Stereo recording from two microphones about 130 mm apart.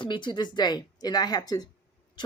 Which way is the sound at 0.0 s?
35° left (ahead or behind).